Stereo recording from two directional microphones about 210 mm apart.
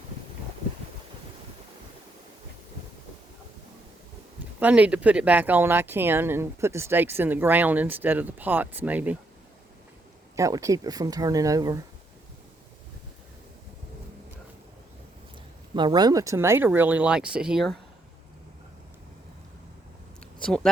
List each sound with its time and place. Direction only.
4.6 s speech: 5° right (ahead or behind)
10.3 s speech: 15° right (ahead or behind)
15.7 s speech: 20° right (ahead or behind); by 17.7 s centre (ahead or behind)